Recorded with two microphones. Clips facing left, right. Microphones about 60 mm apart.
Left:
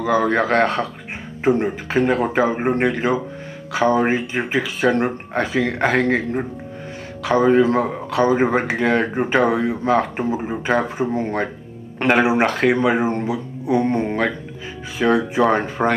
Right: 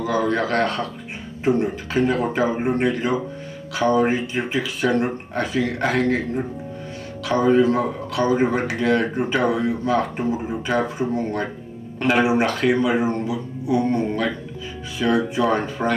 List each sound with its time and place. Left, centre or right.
0.0 s speech: left
12.0 s speech: left
12.8 s speech: left
14.0 s speech: left
15.0 s speech: left